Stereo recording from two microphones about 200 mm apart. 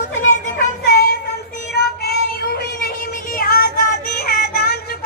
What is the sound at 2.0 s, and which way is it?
Child singing, 50° left (ahead or behind).